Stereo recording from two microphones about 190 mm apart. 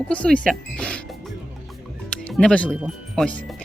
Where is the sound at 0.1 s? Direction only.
5° left (ahead or behind).